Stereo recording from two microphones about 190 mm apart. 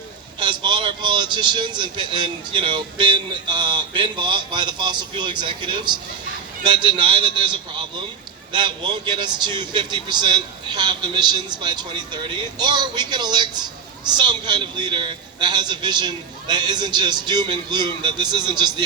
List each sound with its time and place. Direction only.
0.3 s a man's voice: 25° right (ahead or behind)